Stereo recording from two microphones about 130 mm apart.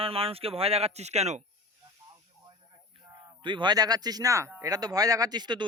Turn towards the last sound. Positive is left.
turn(degrees=-35)  # may be behind; listen again after turning